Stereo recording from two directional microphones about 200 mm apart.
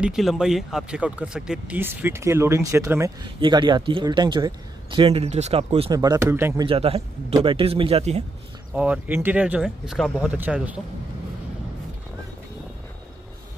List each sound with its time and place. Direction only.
0.0 s speech: centre (ahead or behind)
6.6 s speech: 30° right (ahead or behind)
8.7 s speech: 5° right (ahead or behind)